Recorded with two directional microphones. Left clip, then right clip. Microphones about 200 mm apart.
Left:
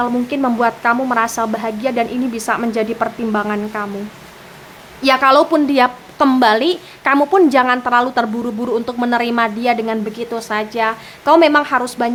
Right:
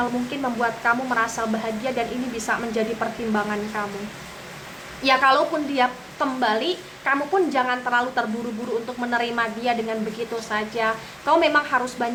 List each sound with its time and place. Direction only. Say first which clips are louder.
0.0 s a woman's voice: left 7 dB; 40° left (ahead or behind)
5.0 s a woman's voice: left 6 dB; 40° left (ahead or behind)